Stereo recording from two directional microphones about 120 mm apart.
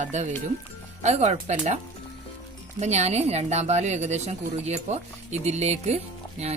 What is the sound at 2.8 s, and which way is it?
A woman's voice, 70° right (ahead or behind).